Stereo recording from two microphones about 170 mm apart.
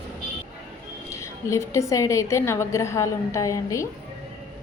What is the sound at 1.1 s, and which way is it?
A woman's voice, 15° left (ahead or behind).